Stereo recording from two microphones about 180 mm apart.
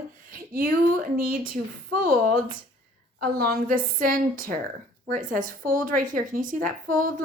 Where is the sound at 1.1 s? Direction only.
55° right (ahead or behind).